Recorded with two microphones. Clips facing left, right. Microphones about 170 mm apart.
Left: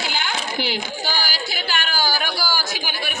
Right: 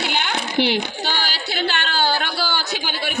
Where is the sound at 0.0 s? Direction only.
65° right (ahead or behind).